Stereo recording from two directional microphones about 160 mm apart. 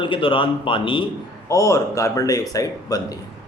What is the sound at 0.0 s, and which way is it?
Speech, 30° left (ahead or behind).